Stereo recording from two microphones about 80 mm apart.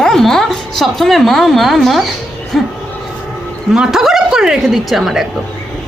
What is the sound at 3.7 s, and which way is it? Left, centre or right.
Speech, centre.